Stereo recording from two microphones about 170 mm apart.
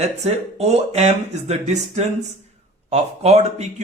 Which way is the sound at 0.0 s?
40° right (ahead or behind).